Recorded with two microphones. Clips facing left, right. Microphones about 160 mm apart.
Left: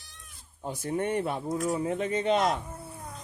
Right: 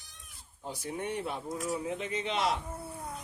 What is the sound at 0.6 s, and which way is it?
Speech, 50° left (ahead or behind).